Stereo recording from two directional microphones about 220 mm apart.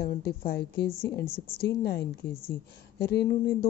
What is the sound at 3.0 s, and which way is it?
Speech, 45° left (ahead or behind).